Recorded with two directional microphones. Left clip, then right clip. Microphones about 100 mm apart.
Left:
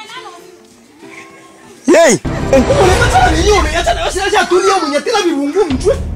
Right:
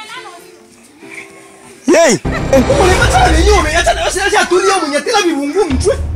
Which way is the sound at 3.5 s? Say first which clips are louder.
Right 1 dB; 5° left (ahead or behind).